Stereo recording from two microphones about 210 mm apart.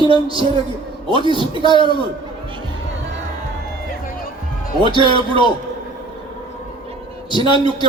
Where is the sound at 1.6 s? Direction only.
25° left (ahead or behind).